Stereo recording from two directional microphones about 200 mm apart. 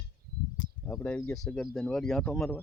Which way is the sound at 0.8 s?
10° left (ahead or behind).